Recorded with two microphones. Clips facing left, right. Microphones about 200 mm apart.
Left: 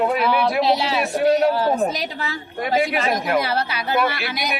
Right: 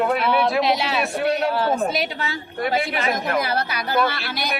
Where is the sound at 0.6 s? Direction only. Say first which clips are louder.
Left 2 dB; 35° left (ahead or behind).